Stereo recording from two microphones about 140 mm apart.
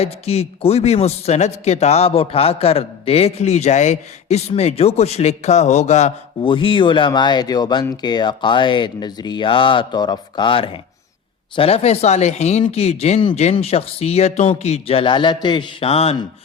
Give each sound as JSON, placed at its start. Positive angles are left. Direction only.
{"t": 0.0, "sound": "a man's voice", "side_deg": 50}
{"t": 6.4, "sound": "a man's voice", "side_deg": 40}